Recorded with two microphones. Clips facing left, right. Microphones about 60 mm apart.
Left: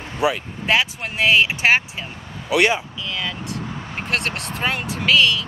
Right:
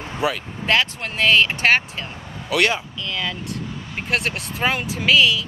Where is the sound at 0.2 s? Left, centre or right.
Centre.